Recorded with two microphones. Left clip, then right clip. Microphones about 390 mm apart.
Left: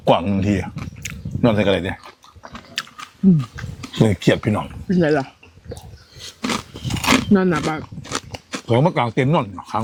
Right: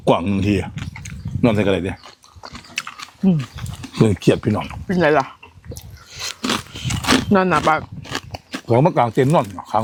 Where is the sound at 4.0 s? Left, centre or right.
Centre.